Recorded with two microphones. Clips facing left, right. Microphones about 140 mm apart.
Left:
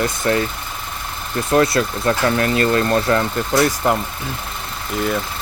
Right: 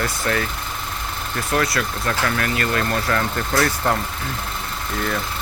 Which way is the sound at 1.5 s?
25° left (ahead or behind).